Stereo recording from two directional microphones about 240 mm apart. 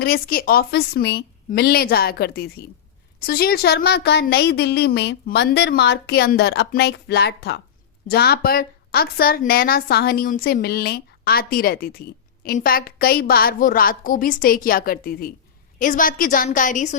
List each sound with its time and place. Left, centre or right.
0.0 s a woman's voice: left